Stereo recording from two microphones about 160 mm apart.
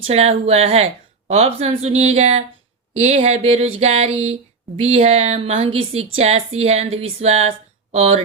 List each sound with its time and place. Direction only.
0.0 s a woman's voice: 40° right (ahead or behind)